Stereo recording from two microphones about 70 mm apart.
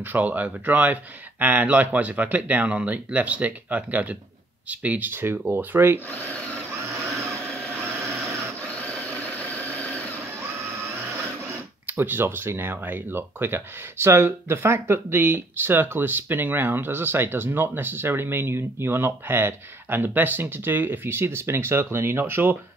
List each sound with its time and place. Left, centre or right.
0.0 s speech: right
6.0 s speech: left
8.5 s vehicle: centre
11.8 s speech: right